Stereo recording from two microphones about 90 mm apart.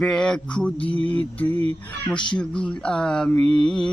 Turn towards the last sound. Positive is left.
turn(degrees=10)  # may be behind; listen again after turning